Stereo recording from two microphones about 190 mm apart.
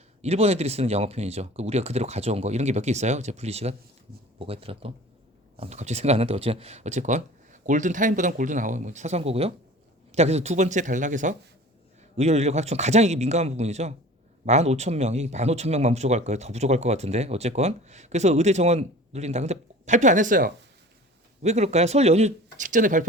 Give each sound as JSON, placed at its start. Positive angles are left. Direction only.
{"t": 0.2, "sound": "speech", "side_deg": -35}